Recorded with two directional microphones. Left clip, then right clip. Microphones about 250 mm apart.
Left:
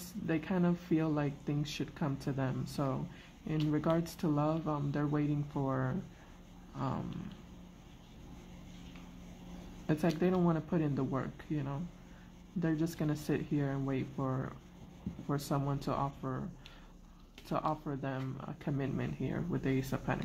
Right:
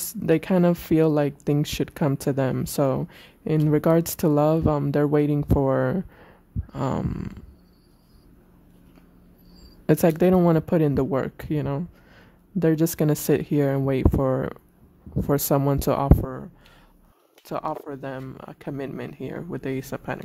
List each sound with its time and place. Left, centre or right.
0.3 s speech: right
6.7 s a sound: right
9.8 s speech: right
17.5 s speech: right